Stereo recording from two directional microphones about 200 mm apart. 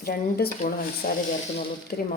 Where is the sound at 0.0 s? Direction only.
50° left (ahead or behind).